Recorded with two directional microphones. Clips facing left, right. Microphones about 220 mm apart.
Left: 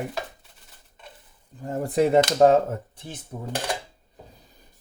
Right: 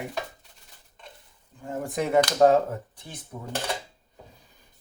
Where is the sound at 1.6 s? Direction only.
40° left (ahead or behind).